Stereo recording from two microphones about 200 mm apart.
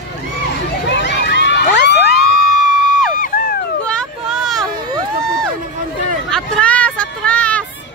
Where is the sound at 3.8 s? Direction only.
Centre (ahead or behind).